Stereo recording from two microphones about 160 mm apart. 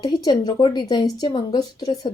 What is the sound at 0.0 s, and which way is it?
A woman's voice, 25° left (ahead or behind).